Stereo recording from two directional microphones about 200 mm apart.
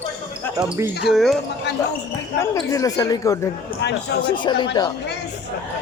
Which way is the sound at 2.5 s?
15° left (ahead or behind).